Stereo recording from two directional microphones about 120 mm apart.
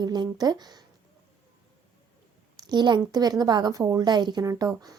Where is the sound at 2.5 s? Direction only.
35° right (ahead or behind).